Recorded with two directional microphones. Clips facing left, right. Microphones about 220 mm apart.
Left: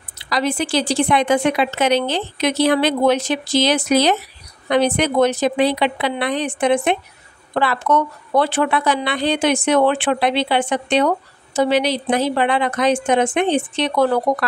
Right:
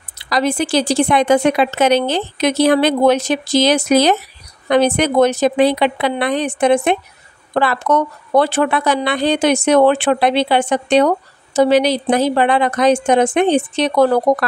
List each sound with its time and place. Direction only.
0.3 s a woman's voice: 45° right (ahead or behind)